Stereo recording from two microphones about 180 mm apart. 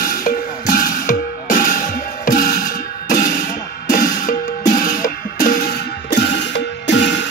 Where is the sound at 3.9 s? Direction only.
50° left (ahead or behind).